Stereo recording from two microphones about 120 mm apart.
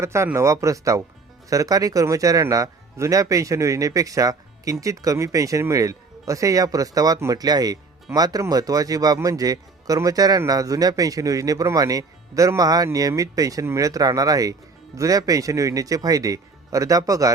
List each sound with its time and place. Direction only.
0.0 s speech: 25° right (ahead or behind)